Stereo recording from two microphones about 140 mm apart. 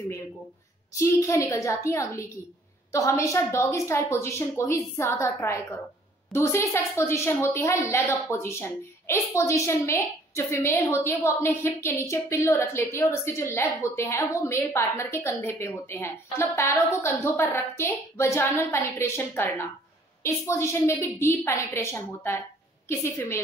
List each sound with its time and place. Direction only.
0.9 s a woman's voice: 20° left (ahead or behind)